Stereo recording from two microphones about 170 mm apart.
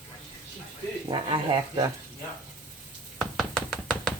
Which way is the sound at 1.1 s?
30° right (ahead or behind).